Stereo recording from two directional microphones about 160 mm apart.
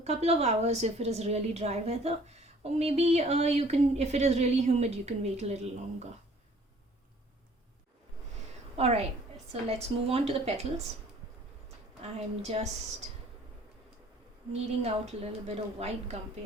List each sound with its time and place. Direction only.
0.0 s a woman's voice: 40° right (ahead or behind)
8.7 s a woman's voice: 40° right (ahead or behind)
10.1 s a woman's voice: 40° right (ahead or behind)
12.0 s a woman's voice: 40° right (ahead or behind)
14.5 s a woman's voice: 40° right (ahead or behind)